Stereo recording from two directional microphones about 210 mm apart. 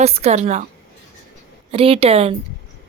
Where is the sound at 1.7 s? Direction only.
25° right (ahead or behind).